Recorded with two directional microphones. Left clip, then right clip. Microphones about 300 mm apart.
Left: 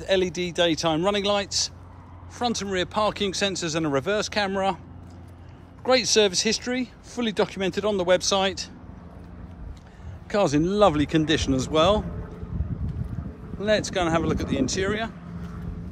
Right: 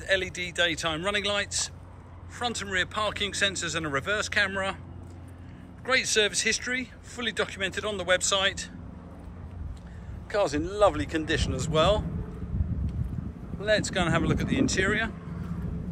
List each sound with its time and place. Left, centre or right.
0.0 s speech: centre
5.9 s speech: centre
10.3 s speech: left
13.6 s speech: left